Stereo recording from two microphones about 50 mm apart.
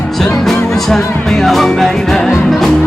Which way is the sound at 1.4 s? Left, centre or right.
Centre.